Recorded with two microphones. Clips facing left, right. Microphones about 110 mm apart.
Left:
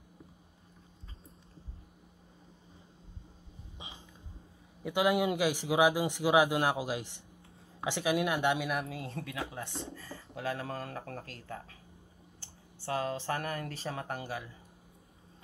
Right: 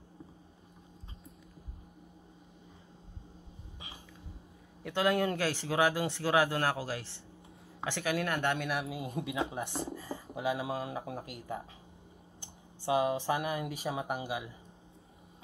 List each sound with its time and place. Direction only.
4.8 s speech: 15° left (ahead or behind)
8.6 s a man's voice: centre (ahead or behind)
8.9 s speech: 15° right (ahead or behind)
9.9 s a sound: 20° right (ahead or behind)
10.2 s speech: 15° right (ahead or behind)